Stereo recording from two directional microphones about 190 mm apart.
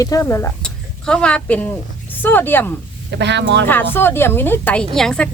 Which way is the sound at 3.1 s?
65° right (ahead or behind).